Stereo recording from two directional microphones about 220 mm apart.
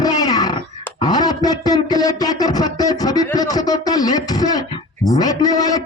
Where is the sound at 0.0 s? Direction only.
15° left (ahead or behind).